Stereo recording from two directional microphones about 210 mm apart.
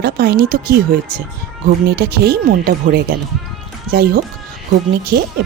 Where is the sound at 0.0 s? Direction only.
50° right (ahead or behind).